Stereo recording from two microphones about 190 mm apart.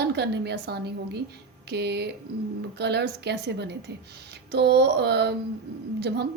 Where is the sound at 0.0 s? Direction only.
60° right (ahead or behind).